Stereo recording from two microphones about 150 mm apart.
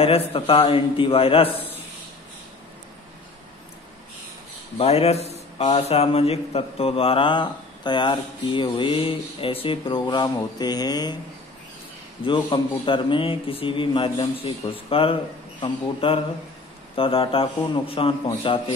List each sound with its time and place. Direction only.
0.0 s a man's voice: 40° left (ahead or behind)
4.7 s a man's voice: 45° left (ahead or behind); by 11.1 s 25° left (ahead or behind)
12.3 s a man's voice: 35° left (ahead or behind)